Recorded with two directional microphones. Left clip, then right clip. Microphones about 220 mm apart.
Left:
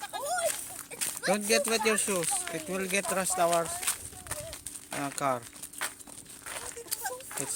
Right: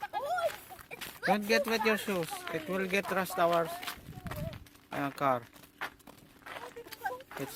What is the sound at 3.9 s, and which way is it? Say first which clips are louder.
Walk: left 6 dB; 15° left (ahead or behind).